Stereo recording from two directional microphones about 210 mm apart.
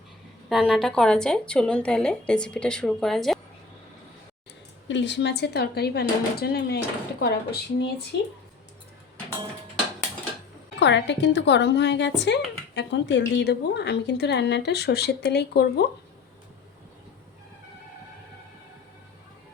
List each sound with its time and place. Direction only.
0.4 s a woman's voice: centre (ahead or behind)
4.9 s a woman's voice: 60° left (ahead or behind)
10.8 s a woman's voice: 55° left (ahead or behind)